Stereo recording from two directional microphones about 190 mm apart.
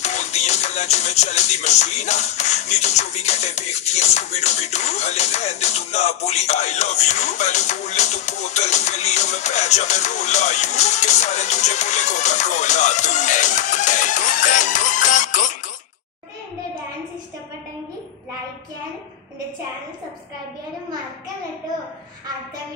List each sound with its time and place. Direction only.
0.0 s music: 35° left (ahead or behind)